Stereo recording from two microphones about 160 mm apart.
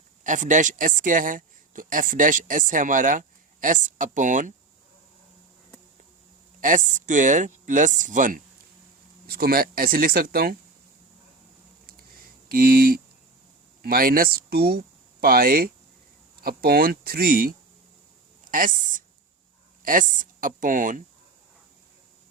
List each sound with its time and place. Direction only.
0.3 s speech: 50° right (ahead or behind)
6.6 s speech: 55° right (ahead or behind)
9.3 s speech: 70° right (ahead or behind)
12.5 s speech: 65° right (ahead or behind)
18.5 s speech: 55° right (ahead or behind)